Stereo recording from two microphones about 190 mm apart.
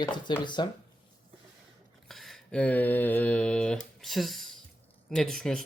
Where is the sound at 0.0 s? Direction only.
25° left (ahead or behind).